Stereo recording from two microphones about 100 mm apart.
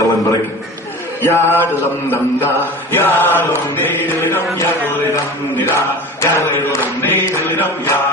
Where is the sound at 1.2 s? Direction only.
25° left (ahead or behind).